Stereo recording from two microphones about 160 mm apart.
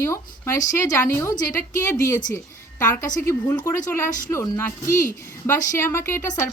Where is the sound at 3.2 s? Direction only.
15° left (ahead or behind).